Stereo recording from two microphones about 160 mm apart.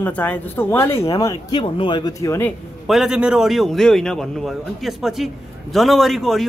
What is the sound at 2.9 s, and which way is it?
A man's voice, 5° right (ahead or behind).